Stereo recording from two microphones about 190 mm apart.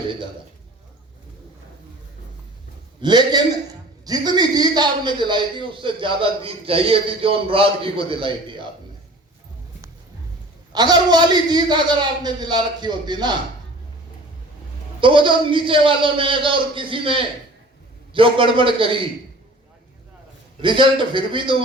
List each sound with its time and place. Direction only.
3.0 s a man's voice: 20° right (ahead or behind)
10.7 s a man's voice: 20° right (ahead or behind)
15.0 s a man's voice: 25° right (ahead or behind)
20.6 s a man's voice: 25° right (ahead or behind)